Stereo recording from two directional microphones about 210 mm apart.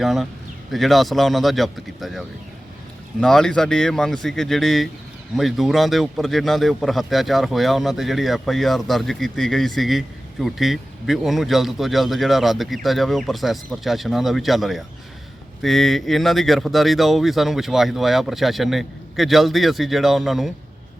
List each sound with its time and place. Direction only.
0.0 s speech: centre (ahead or behind)